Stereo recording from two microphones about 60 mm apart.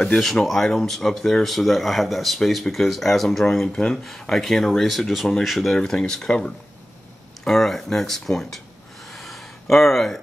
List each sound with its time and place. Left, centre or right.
0.2 s speech: centre
3.6 s speech: centre
5.8 s speech: centre
9.0 s a sound: centre